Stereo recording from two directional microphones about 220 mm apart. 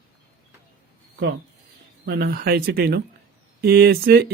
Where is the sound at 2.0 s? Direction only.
45° right (ahead or behind).